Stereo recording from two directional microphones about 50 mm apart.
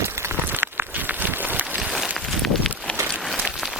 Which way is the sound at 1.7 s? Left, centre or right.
Centre.